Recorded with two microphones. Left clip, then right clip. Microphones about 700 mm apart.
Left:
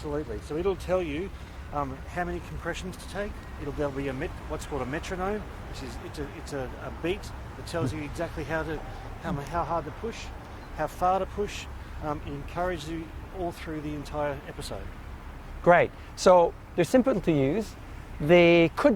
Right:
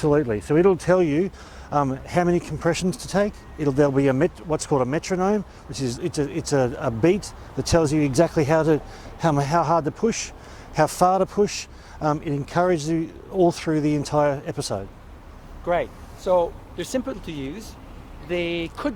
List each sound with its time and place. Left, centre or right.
0.1 s speech: right
1.7 s a man's voice: right
15.6 s speech: left